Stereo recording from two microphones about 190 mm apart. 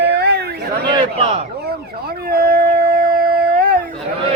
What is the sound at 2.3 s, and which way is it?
Howl, 50° right (ahead or behind).